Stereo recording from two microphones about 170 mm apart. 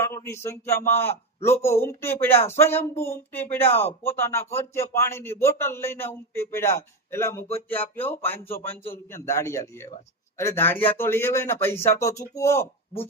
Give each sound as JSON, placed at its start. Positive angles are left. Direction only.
{"t": 0.0, "sound": "speech", "side_deg": 15}